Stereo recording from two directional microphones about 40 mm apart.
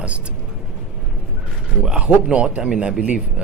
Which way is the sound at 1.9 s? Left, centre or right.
Right.